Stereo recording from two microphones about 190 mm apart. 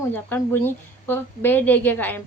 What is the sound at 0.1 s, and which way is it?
Female singing, 10° left (ahead or behind).